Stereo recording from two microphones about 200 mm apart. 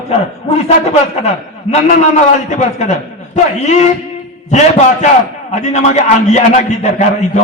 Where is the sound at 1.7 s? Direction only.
35° left (ahead or behind).